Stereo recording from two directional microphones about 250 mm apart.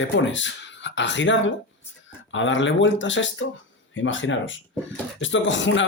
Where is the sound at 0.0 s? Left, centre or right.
Left.